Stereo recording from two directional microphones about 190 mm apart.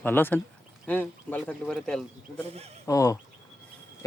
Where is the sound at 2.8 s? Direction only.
15° left (ahead or behind).